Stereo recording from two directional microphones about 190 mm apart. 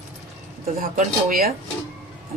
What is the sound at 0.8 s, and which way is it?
Speech, 45° right (ahead or behind).